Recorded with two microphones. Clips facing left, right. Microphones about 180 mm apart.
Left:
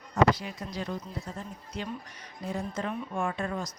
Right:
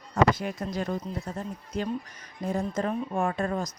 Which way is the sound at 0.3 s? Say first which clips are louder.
Right 6 dB; 50° right (ahead or behind).